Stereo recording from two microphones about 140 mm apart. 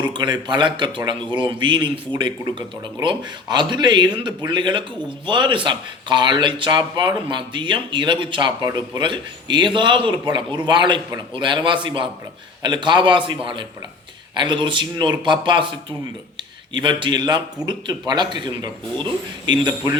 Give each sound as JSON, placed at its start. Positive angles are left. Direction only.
{"t": 0.1, "sound": "a man's voice", "side_deg": -30}